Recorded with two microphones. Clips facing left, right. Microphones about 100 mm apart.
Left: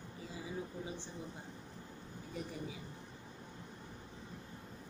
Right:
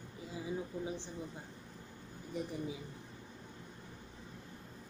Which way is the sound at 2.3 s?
20° right (ahead or behind).